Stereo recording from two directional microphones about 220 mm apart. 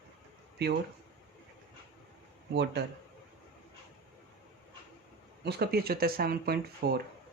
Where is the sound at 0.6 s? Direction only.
45° right (ahead or behind).